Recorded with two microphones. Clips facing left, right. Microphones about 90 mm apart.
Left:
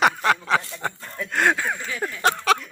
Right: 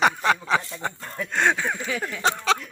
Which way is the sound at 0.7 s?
Centre (ahead or behind).